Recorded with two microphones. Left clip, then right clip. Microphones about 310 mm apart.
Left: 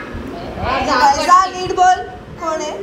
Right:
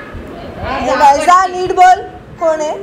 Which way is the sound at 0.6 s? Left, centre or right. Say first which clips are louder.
Right 4 dB; centre.